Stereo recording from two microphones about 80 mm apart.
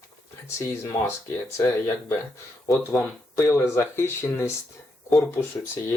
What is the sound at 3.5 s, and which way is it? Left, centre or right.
Speech, left.